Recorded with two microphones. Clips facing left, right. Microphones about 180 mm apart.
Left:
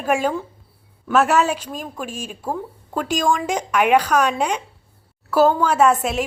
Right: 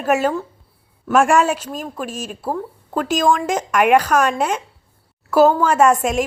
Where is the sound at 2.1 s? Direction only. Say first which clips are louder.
Right 3 dB; 45° right (ahead or behind).